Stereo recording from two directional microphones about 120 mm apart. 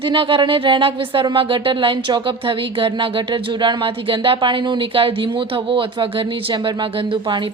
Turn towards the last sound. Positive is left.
turn(degrees=-40)  # may be behind; listen again after turning